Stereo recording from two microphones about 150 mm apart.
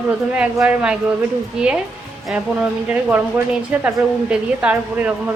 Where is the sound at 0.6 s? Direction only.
5° right (ahead or behind).